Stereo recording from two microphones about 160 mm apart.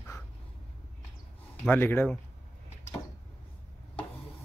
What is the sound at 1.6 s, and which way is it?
Speech, 10° left (ahead or behind).